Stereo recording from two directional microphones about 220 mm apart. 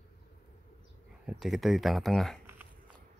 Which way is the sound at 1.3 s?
Centre (ahead or behind).